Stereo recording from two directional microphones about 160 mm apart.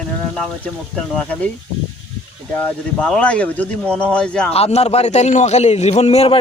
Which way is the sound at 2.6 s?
5° left (ahead or behind).